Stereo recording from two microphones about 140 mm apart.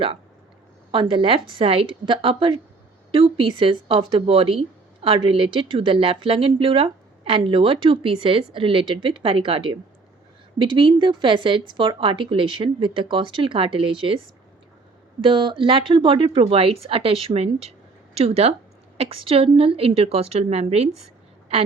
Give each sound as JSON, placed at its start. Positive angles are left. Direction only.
{"t": 0.9, "sound": "speech", "side_deg": -35}
{"t": 15.2, "sound": "a woman's voice", "side_deg": -35}